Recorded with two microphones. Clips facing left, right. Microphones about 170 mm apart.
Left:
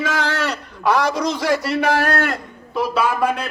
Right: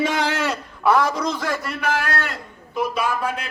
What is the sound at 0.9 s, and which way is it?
Speech, 80° left.